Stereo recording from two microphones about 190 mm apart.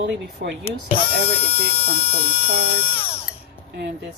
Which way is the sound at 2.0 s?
30° left (ahead or behind).